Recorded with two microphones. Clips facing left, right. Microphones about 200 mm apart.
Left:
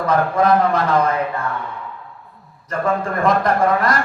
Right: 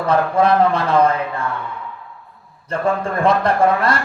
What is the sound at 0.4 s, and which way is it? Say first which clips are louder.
Speech: even; 30° right (ahead or behind).